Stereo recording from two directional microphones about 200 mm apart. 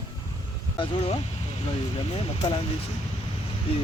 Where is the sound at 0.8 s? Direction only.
30° left (ahead or behind).